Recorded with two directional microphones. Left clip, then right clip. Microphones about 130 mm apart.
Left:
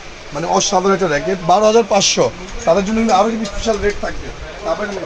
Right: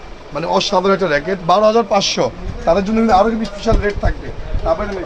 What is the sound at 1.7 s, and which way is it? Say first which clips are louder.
Speech: left 1 dB; 65° left (ahead or behind).